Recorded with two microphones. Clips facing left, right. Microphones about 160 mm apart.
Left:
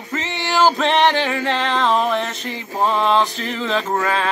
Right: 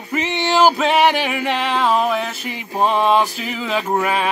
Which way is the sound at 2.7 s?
20° right (ahead or behind).